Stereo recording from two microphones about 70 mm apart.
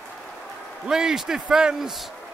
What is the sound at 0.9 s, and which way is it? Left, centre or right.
A man's voice, centre.